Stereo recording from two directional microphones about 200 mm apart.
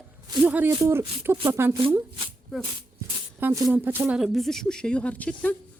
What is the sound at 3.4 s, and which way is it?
A woman's voice, 15° right (ahead or behind).